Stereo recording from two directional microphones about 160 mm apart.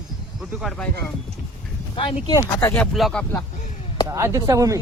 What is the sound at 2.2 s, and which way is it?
Speech, 20° left (ahead or behind).